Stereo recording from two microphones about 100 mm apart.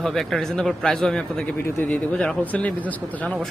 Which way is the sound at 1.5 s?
25° left (ahead or behind).